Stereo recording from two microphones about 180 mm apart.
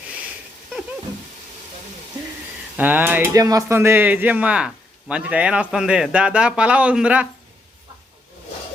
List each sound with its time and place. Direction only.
2.7 s speech: 10° right (ahead or behind)